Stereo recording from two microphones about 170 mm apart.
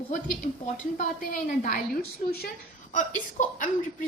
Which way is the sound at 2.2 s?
40° left (ahead or behind).